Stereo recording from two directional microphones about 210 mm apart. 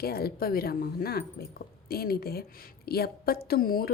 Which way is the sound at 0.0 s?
45° left (ahead or behind).